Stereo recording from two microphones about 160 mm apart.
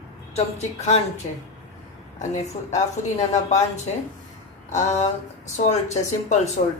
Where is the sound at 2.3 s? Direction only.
45° left (ahead or behind).